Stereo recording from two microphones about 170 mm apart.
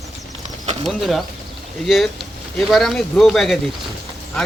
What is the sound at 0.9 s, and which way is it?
Speech, centre (ahead or behind).